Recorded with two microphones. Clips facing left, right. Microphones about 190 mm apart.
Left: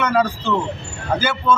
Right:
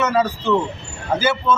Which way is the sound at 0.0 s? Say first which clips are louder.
Even; 5° right (ahead or behind).